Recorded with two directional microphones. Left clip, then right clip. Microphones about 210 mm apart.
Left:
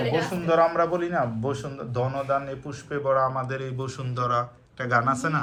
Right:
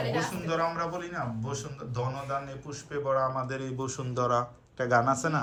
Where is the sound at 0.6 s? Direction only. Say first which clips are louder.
Left 8 dB; 10° left (ahead or behind).